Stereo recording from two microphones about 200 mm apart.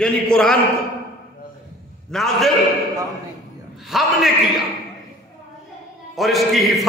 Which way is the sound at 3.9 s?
Centre (ahead or behind).